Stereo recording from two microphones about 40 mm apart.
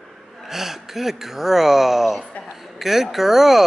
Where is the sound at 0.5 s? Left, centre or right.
Centre.